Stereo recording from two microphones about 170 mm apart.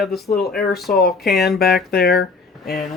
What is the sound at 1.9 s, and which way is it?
Speech, 70° left (ahead or behind).